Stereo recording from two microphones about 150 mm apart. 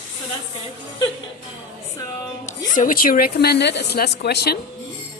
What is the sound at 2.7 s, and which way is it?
A woman's voice, 65° left (ahead or behind).